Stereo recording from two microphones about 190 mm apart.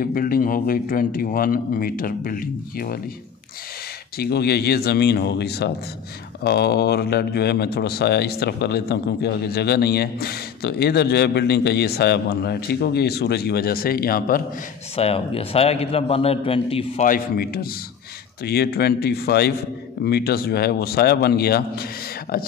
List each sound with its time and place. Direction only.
0.0 s speech: 50° left (ahead or behind)
4.2 s speech: 55° left (ahead or behind)
15.0 s a man's voice: 30° left (ahead or behind)
17.1 s speech: 50° left (ahead or behind)